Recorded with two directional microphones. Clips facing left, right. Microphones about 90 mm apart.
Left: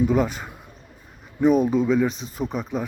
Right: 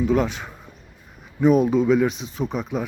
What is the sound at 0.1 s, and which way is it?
Speech, centre (ahead or behind).